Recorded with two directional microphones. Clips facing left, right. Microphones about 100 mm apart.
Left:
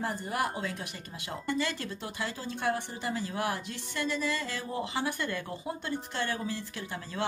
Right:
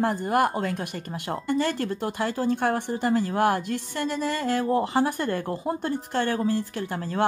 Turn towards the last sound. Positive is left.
turn(degrees=-50)  # may be behind; listen again after turning